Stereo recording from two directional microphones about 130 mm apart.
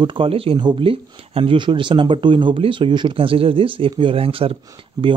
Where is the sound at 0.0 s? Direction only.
40° right (ahead or behind).